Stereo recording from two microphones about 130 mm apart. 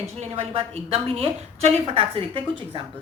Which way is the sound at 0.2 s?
50° right (ahead or behind).